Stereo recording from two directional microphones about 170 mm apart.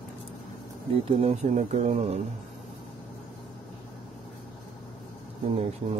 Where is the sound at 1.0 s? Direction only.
35° right (ahead or behind).